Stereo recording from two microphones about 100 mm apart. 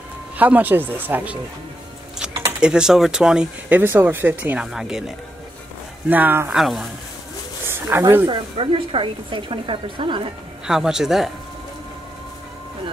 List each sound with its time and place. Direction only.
0.4 s speech: 15° right (ahead or behind)
2.6 s speech: 5° right (ahead or behind)
4.7 s speech: 5° right (ahead or behind)
6.0 s speech: 20° right (ahead or behind)
6.5 s speech: 5° right (ahead or behind)
7.6 s a sound: 25° right (ahead or behind)
8.3 s a woman's voice: 60° right (ahead or behind)
10.7 s speech: 5° right (ahead or behind)